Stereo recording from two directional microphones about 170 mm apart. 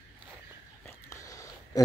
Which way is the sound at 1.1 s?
20° left (ahead or behind).